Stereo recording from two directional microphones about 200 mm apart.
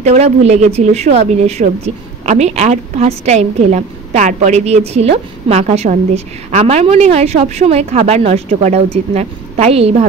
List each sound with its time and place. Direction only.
0.0 s a woman's voice: 35° right (ahead or behind)